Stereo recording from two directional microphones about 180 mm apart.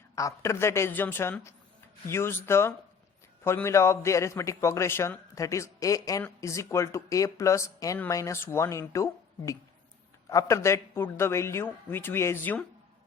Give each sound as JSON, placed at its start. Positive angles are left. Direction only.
{"t": 0.2, "sound": "a man's voice", "side_deg": 15}
{"t": 10.2, "sound": "a man's voice", "side_deg": 15}